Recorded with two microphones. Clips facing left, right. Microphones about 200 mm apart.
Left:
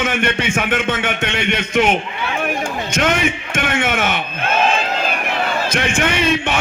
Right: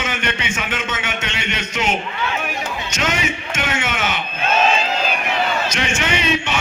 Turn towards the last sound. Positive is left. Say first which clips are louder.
# left 3 dB
turn(degrees=55)  # may be behind; listen again after turning